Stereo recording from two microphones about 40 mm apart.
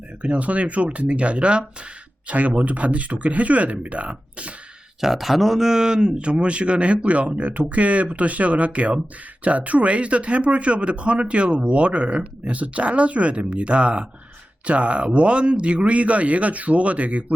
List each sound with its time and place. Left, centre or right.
0.2 s a man's voice: right
4.9 s a man's voice: centre; by 17.3 s right